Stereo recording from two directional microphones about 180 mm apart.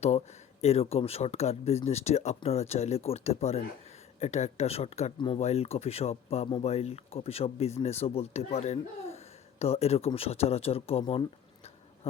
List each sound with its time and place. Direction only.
0.6 s speech: 35° left (ahead or behind)